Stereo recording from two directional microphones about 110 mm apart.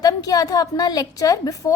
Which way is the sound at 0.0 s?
35° left (ahead or behind).